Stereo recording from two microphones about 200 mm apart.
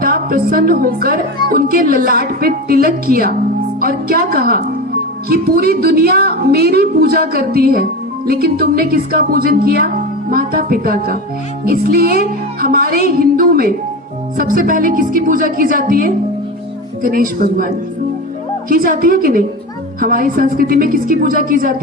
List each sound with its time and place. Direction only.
0.0 s a woman's voice: 45° right (ahead or behind)
18.7 s a woman's voice: 45° right (ahead or behind)